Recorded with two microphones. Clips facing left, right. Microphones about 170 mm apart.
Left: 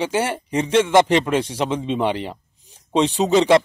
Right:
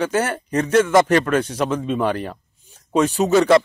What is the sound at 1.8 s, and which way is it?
A man's voice, 20° left (ahead or behind).